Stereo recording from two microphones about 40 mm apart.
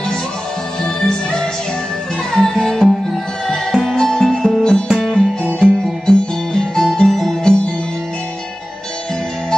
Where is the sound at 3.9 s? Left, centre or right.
Centre.